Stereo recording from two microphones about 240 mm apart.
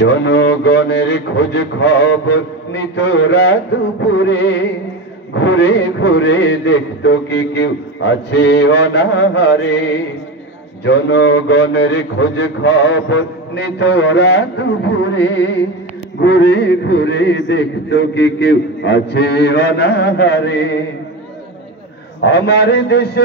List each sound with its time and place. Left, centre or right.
0.0 s a man's voice: left
10.8 s a man's voice: left
22.2 s a man's voice: left